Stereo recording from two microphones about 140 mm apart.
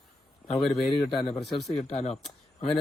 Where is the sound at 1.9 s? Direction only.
50° left (ahead or behind).